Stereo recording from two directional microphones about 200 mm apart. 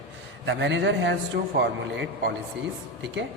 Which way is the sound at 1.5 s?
50° right (ahead or behind).